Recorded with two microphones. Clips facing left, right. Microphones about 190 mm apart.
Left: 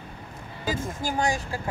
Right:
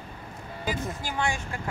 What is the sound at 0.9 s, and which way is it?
Speech, 45° left (ahead or behind).